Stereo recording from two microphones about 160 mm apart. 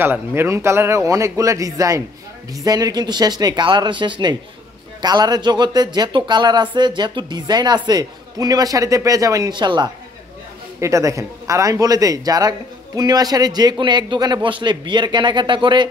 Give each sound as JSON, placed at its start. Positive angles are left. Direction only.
{"t": 0.0, "sound": "speech", "side_deg": -15}